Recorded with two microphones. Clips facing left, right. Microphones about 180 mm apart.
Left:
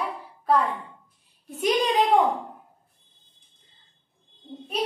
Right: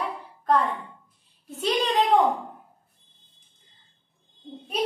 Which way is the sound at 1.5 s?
10° left (ahead or behind).